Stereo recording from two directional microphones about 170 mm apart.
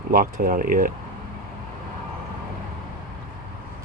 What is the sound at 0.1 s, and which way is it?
Speech, 55° right (ahead or behind).